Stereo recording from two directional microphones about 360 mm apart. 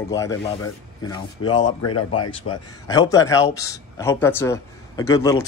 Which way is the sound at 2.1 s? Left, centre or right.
Left.